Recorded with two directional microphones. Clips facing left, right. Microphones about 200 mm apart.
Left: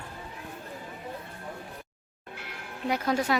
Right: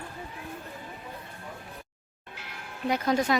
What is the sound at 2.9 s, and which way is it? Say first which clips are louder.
Speech: right 2 dB; 5° left (ahead or behind).